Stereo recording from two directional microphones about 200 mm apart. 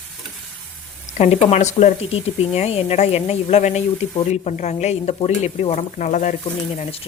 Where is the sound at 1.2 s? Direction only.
35° left (ahead or behind).